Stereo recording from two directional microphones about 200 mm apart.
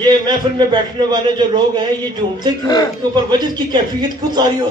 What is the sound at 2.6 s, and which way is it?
Speech, 20° left (ahead or behind).